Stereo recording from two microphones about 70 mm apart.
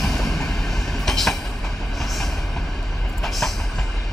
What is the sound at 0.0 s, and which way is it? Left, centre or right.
Train, centre.